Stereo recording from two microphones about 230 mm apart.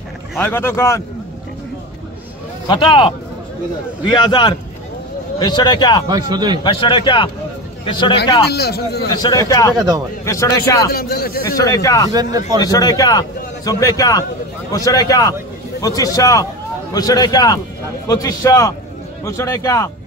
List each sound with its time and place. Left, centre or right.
0.4 s a man's voice: centre
2.7 s a man's voice: left
4.1 s a man's voice: left
6.0 s a man's voice: centre
6.6 s a man's voice: left
8.5 s a man's voice: left
9.1 s a man's voice: centre
9.8 s a man's voice: centre
10.2 s a man's voice: centre
10.9 s a man's voice: left
11.5 s a man's voice: centre
12.4 s a man's voice: centre
12.6 s a man's voice: centre